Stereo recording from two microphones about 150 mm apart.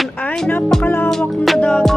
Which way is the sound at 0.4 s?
5° left (ahead or behind).